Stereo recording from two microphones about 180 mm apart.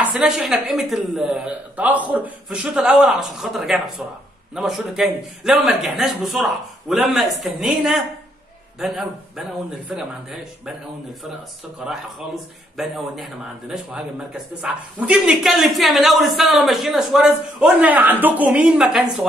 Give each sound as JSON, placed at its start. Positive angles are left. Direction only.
{"t": 0.0, "sound": "a man's voice", "side_deg": -5}
{"t": 12.7, "sound": "a man's voice", "side_deg": 0}